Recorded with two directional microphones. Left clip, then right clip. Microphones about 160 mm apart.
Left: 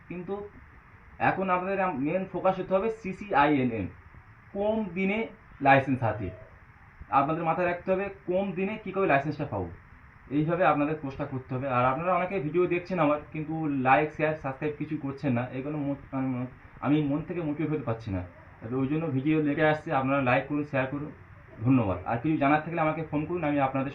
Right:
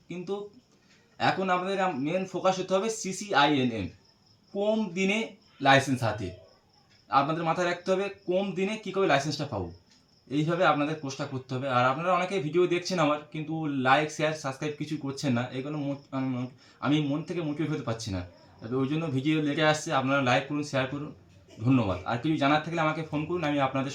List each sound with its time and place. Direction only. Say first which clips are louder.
1.2 s speech: even; 10° right (ahead or behind)
2.5 s speech: left 1 dB; 10° right (ahead or behind)
7.1 s speech: even; 15° right (ahead or behind)
15.1 s speech: right 1 dB; 20° right (ahead or behind)